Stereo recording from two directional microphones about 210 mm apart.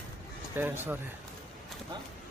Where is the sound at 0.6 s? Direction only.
10° right (ahead or behind).